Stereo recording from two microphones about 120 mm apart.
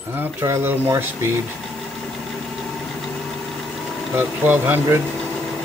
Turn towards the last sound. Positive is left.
turn(degrees=-15)  # may be behind; listen again after turning